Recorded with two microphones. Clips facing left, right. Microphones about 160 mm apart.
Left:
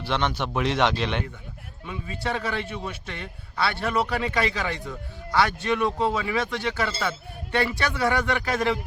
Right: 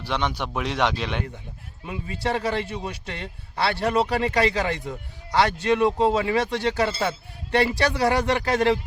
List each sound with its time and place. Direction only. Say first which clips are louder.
0.0 s speech: left 1 dB; 10° right (ahead or behind)
1.9 s a man's voice: right 3 dB; 25° right (ahead or behind)